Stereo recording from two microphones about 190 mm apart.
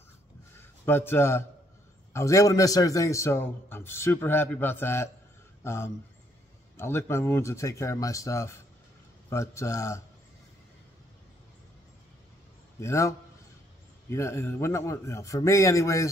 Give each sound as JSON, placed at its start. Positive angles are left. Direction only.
{"t": 0.6, "sound": "a man's voice", "side_deg": 10}
{"t": 12.8, "sound": "a man's voice", "side_deg": 15}
{"t": 14.1, "sound": "a man's voice", "side_deg": 15}